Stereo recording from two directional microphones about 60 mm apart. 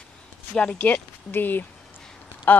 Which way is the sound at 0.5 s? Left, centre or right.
Left.